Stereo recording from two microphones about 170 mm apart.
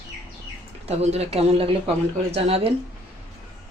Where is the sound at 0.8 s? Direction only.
40° right (ahead or behind).